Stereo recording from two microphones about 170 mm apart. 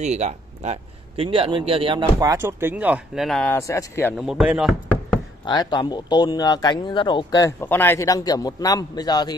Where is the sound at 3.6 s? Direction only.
20° left (ahead or behind).